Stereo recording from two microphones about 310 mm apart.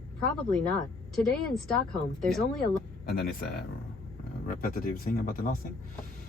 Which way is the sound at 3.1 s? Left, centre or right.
Left.